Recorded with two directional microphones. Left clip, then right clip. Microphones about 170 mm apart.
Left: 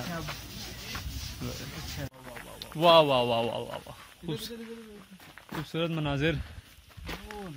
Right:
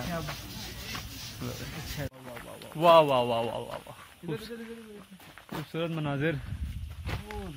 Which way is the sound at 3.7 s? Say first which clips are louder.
Even; 35° left (ahead or behind).